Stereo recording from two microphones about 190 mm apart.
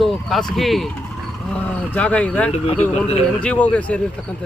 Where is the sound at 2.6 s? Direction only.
35° left (ahead or behind).